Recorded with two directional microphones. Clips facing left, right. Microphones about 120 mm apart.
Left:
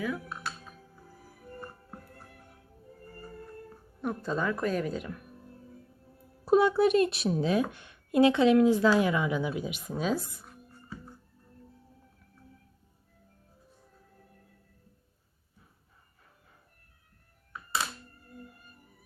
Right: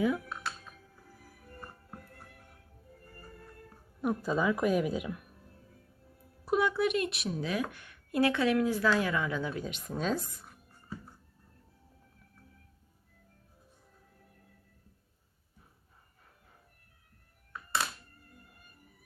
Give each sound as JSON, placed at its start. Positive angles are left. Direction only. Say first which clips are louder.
{"t": 4.0, "sound": "speech", "louder": "right 1 dB", "side_deg": -5}
{"t": 6.4, "sound": "speech", "louder": "left 6 dB", "side_deg": 30}